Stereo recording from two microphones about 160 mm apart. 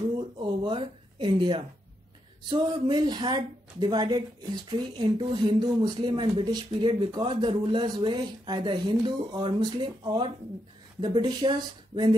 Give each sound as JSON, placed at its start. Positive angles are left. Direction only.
{"t": 0.4, "sound": "speech", "side_deg": -30}